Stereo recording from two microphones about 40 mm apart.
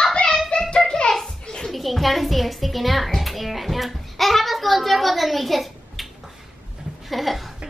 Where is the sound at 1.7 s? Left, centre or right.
Centre.